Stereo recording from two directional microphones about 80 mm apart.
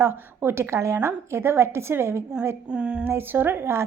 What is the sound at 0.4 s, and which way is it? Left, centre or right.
A woman's voice, right.